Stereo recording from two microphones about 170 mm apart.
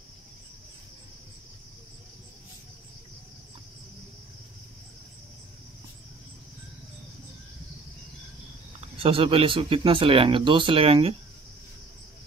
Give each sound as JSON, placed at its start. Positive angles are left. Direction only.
{"t": 8.9, "sound": "speech", "side_deg": -35}